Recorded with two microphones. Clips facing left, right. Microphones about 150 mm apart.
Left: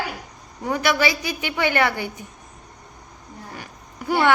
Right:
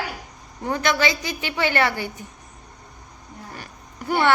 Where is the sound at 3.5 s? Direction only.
15° left (ahead or behind).